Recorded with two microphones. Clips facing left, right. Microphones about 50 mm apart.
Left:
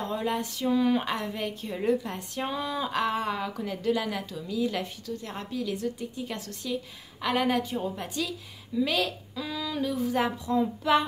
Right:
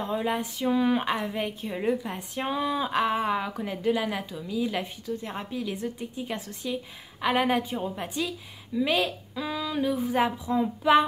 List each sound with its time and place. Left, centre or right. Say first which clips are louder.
0.0 s a woman's voice: right 1 dB; centre